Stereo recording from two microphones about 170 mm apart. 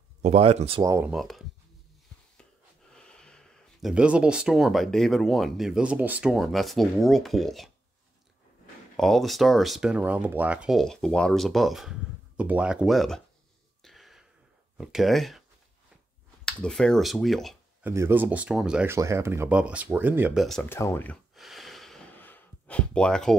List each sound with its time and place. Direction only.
0.2 s speech: 40° right (ahead or behind)
0.8 s speech: 15° right (ahead or behind)
1.1 s speech: centre (ahead or behind)
2.9 s a sound: 5° left (ahead or behind)
3.9 s speech: 5° right (ahead or behind)
8.9 s speech: centre (ahead or behind)
13.8 s a sound: centre (ahead or behind)
14.8 s speech: centre (ahead or behind)
16.4 s speech: 5° left (ahead or behind)
17.8 s speech: 15° right (ahead or behind)
20.4 s speech: 5° left (ahead or behind)
21.4 s a sound: centre (ahead or behind)
22.2 s gasp: 10° left (ahead or behind)